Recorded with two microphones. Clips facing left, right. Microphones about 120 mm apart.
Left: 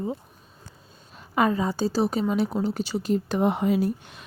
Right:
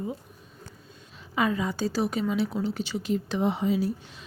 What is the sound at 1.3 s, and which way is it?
A woman's voice, 45° left (ahead or behind).